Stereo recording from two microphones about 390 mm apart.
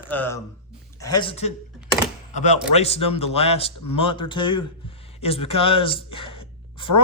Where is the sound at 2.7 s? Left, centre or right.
Centre.